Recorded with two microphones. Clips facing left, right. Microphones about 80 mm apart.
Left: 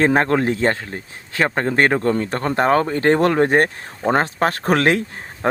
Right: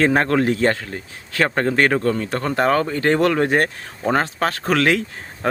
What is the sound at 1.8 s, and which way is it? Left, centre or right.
Speech, left.